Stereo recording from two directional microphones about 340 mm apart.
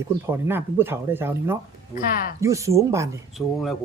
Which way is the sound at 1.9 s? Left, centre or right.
Left.